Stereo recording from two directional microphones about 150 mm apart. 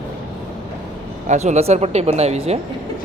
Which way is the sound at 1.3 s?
50° right (ahead or behind).